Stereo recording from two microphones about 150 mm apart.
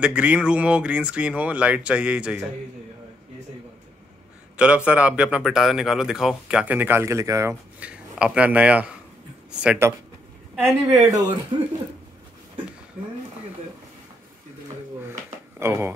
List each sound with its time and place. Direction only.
0.0 s a man's voice: 10° right (ahead or behind)
4.6 s a man's voice: 10° right (ahead or behind)
7.8 s a man's voice: 10° right (ahead or behind)
10.6 s speech: 25° right (ahead or behind)
15.6 s a man's voice: 15° right (ahead or behind)